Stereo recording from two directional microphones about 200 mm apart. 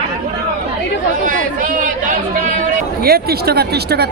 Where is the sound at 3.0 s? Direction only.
50° right (ahead or behind).